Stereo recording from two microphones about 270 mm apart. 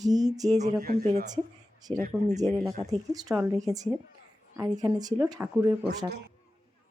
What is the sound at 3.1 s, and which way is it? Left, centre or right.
Speech, centre.